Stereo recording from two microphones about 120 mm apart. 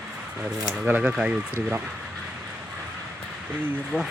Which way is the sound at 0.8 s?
10° right (ahead or behind).